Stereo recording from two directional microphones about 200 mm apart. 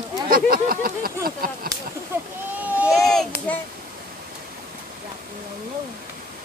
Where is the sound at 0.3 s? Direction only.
45° right (ahead or behind).